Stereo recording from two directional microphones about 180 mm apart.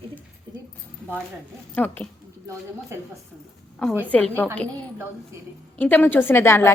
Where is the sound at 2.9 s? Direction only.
15° right (ahead or behind).